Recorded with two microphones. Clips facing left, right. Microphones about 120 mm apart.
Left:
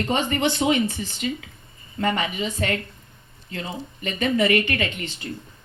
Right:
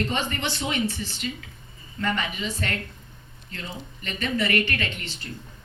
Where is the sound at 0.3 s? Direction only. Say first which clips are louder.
Left 7 dB; 45° left (ahead or behind).